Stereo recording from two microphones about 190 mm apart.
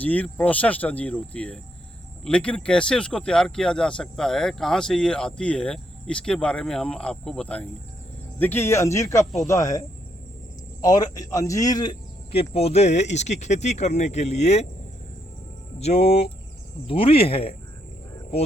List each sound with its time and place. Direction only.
0.0 s speech: 10° left (ahead or behind); by 14.7 s 35° left (ahead or behind)
15.8 s speech: 35° left (ahead or behind)